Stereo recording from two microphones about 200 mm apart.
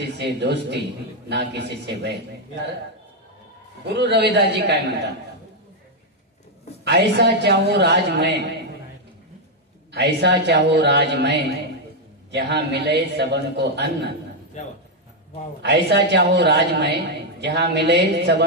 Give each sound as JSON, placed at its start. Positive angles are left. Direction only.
{"t": 0.2, "sound": "a woman's voice", "side_deg": -60}
{"t": 3.8, "sound": "a woman's voice", "side_deg": -60}
{"t": 6.8, "sound": "a woman's voice", "side_deg": -60}
{"t": 9.9, "sound": "a woman's voice", "side_deg": -60}
{"t": 15.6, "sound": "a woman's voice", "side_deg": -60}